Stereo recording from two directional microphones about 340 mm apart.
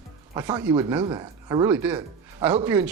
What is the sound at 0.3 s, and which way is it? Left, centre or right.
Speech, centre.